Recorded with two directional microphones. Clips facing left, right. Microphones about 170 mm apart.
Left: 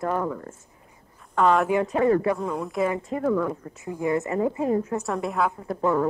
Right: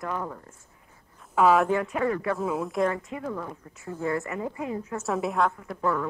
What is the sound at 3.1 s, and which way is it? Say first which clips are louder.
Speech: left 7 dB; 40° left (ahead or behind).